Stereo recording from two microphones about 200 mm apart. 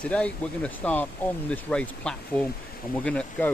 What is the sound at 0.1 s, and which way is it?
Speech, 5° left (ahead or behind).